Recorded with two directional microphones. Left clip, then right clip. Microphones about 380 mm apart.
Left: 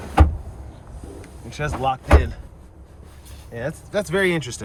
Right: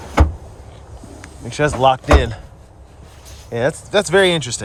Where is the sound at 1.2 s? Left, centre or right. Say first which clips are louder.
Right 10 dB; centre.